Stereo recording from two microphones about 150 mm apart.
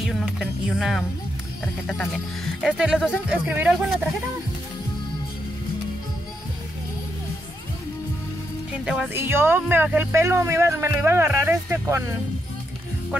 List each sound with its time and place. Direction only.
0.0 s speech: 5° right (ahead or behind)
8.8 s speech: 5° right (ahead or behind)
9.1 s speech: 15° right (ahead or behind)